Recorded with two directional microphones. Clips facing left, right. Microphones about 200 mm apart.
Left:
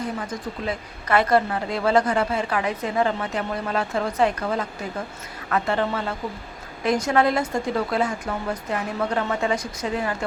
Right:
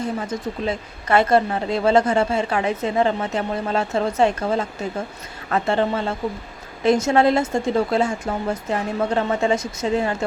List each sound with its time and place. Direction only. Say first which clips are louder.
0.0 s a woman's voice: right 4 dB; 25° right (ahead or behind)